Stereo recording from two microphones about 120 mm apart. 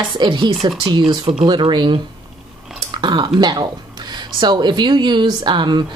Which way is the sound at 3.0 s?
40° right (ahead or behind).